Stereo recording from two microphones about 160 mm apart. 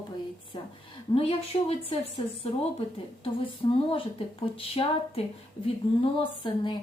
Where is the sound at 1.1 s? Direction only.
35° left (ahead or behind).